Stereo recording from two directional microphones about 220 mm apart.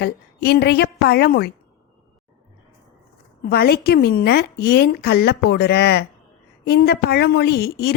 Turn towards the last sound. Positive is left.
turn(degrees=45)  # may be behind; listen again after turning